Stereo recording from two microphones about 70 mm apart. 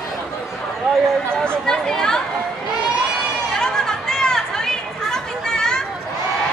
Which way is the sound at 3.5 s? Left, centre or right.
Centre.